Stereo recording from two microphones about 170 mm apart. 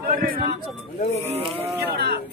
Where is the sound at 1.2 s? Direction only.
35° right (ahead or behind).